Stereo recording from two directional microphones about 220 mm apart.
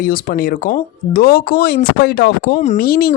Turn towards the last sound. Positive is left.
turn(degrees=45)  # may be behind; listen again after turning